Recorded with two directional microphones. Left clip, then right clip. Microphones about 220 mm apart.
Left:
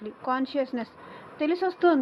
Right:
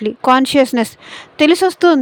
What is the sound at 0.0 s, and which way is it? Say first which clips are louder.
A woman's voice: right 17 dB; 75° right (ahead or behind).